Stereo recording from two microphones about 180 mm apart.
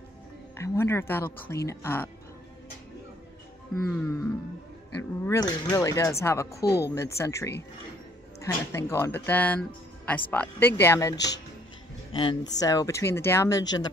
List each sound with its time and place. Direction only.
0.6 s speech: 15° left (ahead or behind)
3.8 s speech: 10° left (ahead or behind)
12.1 s speech: 30° left (ahead or behind)